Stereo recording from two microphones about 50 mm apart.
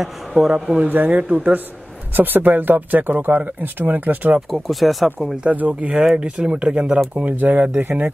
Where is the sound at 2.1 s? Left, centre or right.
Right.